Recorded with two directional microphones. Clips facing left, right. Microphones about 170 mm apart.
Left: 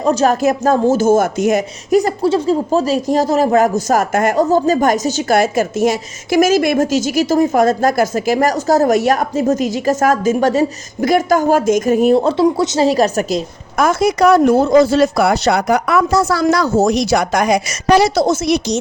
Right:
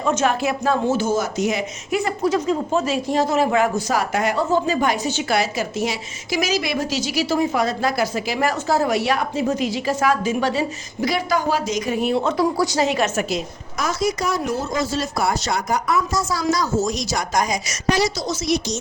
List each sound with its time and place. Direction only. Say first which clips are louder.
0.0 s speech: left 7 dB; 35° left (ahead or behind)
12.9 s a woman's voice: left 7 dB; 40° left (ahead or behind)
13.7 s speech: left 9 dB; 60° left (ahead or behind)